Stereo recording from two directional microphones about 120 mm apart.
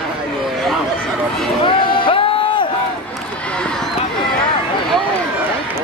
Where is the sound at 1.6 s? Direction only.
45° left (ahead or behind).